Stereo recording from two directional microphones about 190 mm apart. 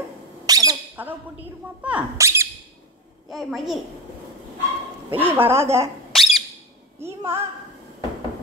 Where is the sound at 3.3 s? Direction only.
Centre (ahead or behind).